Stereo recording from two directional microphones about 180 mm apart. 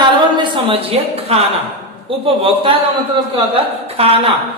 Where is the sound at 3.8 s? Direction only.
35° right (ahead or behind).